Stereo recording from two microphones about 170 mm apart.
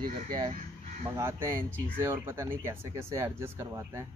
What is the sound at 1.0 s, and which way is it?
Speech, 15° right (ahead or behind).